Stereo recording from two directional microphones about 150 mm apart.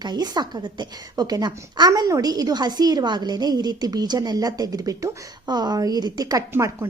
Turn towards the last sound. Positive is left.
turn(degrees=-20)  # may be behind; listen again after turning